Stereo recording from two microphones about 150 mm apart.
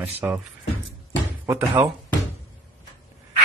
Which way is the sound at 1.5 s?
15° right (ahead or behind).